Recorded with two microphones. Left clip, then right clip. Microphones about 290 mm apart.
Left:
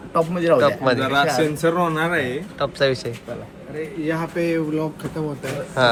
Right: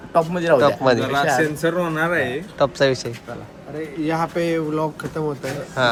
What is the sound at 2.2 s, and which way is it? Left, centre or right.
Speech, centre.